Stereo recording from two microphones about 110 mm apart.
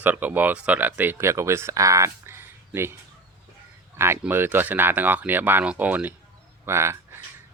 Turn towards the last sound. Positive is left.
turn(degrees=-25)  # may be behind; listen again after turning